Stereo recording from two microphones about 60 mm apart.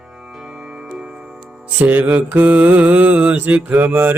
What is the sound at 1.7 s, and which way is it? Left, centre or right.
Mantra, right.